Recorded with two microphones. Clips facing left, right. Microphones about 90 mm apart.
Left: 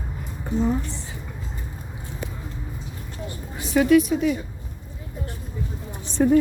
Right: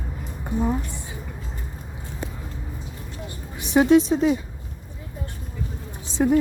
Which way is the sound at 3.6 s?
20° right (ahead or behind).